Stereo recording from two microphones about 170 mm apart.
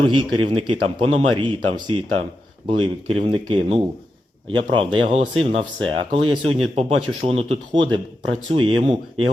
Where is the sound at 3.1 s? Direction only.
35° right (ahead or behind).